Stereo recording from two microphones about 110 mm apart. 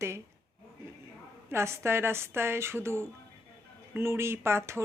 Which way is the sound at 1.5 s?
25° right (ahead or behind).